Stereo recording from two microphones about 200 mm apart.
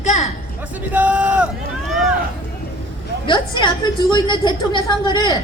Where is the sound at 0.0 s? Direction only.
35° left (ahead or behind).